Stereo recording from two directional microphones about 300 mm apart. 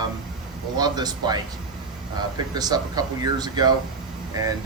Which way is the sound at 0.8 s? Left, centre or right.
Centre.